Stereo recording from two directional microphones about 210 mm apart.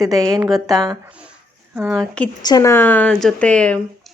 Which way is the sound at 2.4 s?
20° left (ahead or behind).